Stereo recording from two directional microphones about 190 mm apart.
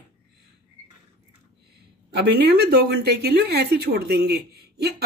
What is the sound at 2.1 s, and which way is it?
Speech, 55° right (ahead or behind).